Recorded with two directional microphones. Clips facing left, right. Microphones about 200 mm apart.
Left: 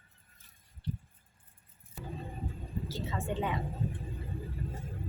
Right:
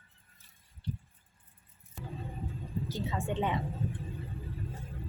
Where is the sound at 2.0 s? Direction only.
Centre (ahead or behind).